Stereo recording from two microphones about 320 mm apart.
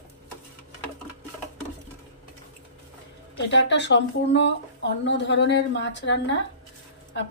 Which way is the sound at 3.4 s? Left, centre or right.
Left.